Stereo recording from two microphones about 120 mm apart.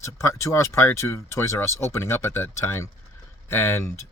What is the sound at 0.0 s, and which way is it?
Speech, 25° left (ahead or behind).